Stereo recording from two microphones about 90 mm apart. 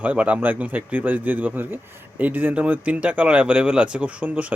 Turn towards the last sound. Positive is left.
turn(degrees=-15)  # may be behind; listen again after turning